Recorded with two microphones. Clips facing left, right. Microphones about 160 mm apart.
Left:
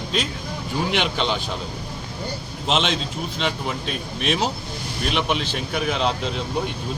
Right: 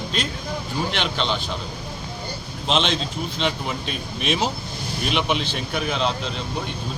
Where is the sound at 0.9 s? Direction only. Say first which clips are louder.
Left 3 dB; 10° left (ahead or behind).